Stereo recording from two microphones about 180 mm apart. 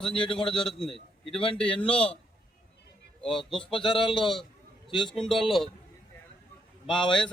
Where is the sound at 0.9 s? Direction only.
30° left (ahead or behind).